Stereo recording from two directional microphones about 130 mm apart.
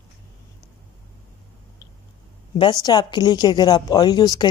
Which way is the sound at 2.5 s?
35° left (ahead or behind).